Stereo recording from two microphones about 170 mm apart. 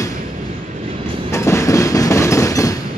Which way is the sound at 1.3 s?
15° left (ahead or behind).